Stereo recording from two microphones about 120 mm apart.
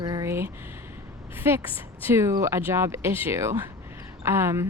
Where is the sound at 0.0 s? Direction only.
30° right (ahead or behind).